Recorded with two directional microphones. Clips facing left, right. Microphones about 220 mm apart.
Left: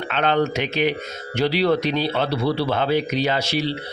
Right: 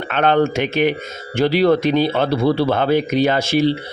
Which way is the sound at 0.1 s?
50° right (ahead or behind).